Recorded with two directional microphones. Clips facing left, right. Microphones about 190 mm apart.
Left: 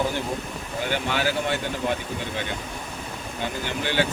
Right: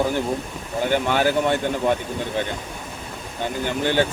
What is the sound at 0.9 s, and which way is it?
Speech, 50° right (ahead or behind).